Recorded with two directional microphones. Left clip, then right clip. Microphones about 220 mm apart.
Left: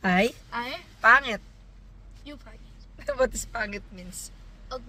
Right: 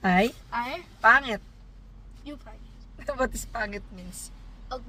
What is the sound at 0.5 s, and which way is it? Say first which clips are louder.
Speech: right 2 dB; 5° right (ahead or behind).